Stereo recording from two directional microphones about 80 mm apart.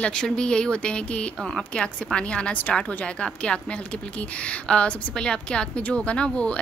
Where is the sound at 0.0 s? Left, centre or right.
Centre.